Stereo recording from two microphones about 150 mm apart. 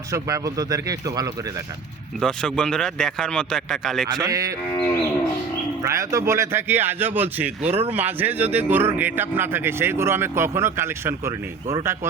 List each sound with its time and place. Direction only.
0.1 s speech: 20° right (ahead or behind)
2.2 s speech: 5° left (ahead or behind)
4.2 s speech: 20° right (ahead or behind)
5.8 s speech: 20° right (ahead or behind)
7.6 s speech: 45° right (ahead or behind)
7.9 s speech: 10° right (ahead or behind)